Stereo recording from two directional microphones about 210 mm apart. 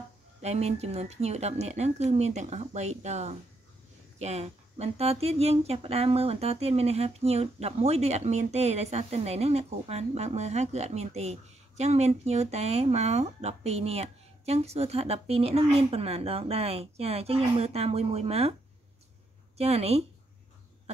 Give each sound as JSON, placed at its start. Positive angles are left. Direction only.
{"t": 0.4, "sound": "speech", "side_deg": -30}
{"t": 19.5, "sound": "speech", "side_deg": -30}